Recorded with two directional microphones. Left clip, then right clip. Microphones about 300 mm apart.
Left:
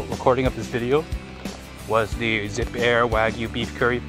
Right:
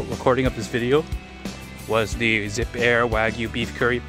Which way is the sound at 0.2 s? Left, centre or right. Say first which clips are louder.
Even; right.